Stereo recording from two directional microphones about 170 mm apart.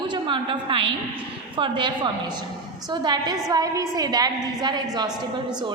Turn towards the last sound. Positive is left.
turn(degrees=-25)  # may be behind; listen again after turning